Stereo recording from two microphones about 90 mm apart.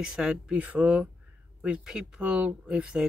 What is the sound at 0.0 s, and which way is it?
Speech, 5° right (ahead or behind).